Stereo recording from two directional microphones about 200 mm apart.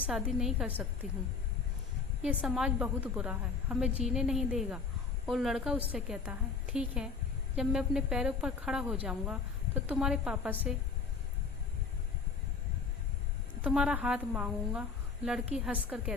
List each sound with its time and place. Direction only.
0.1 s a woman's voice: centre (ahead or behind)
2.2 s a woman's voice: 5° right (ahead or behind)
13.6 s a woman's voice: 5° right (ahead or behind)